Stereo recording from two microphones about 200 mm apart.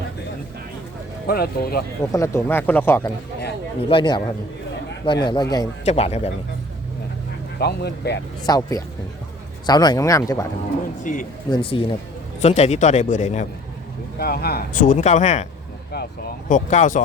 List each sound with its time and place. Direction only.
1.3 s speech: 50° left (ahead or behind)
2.1 s speech: 15° left (ahead or behind)
3.8 s speech: 25° left (ahead or behind)
5.8 s speech: 30° left (ahead or behind)
7.6 s speech: 55° left (ahead or behind)
8.4 s speech: 20° left (ahead or behind)
11.0 s speech: 40° left (ahead or behind)
11.5 s speech: 25° left (ahead or behind)
14.2 s speech: 50° left (ahead or behind)
16.5 s speech: 40° left (ahead or behind)